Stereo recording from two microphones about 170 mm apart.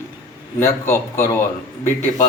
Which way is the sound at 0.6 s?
15° left (ahead or behind).